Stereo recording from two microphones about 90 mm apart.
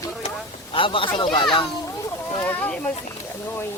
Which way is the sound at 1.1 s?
60° left (ahead or behind).